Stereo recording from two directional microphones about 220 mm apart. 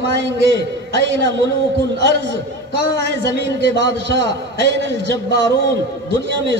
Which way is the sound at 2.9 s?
55° right (ahead or behind).